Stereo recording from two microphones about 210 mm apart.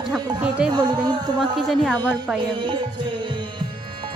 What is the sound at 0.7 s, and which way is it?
Speech, 20° right (ahead or behind).